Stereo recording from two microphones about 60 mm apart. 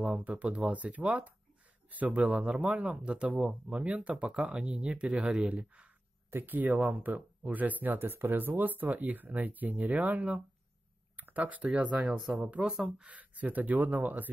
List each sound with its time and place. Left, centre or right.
0.0 s speech: right
6.3 s speech: right
12.0 s speech: centre
12.4 s speech: right
12.6 s speech: centre
13.0 s speech: right